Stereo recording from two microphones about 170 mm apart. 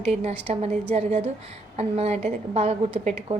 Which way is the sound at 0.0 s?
40° right (ahead or behind).